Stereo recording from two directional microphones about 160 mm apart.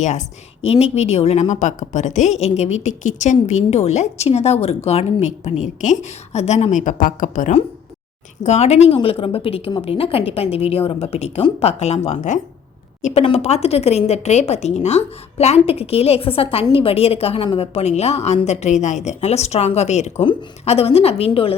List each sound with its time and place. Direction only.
0.0 s a woman's voice: 45° left (ahead or behind)